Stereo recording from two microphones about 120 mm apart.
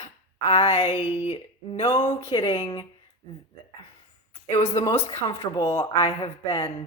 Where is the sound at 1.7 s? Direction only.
60° left (ahead or behind).